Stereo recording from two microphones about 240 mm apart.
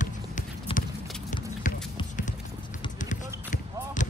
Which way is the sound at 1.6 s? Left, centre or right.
Left.